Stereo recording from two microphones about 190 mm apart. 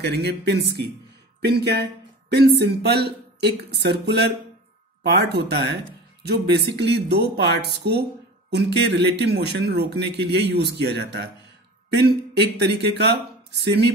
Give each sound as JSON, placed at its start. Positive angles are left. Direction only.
{"t": 0.0, "sound": "speech", "side_deg": -60}
{"t": 1.4, "sound": "a sound", "side_deg": -60}
{"t": 2.6, "sound": "speech", "side_deg": -60}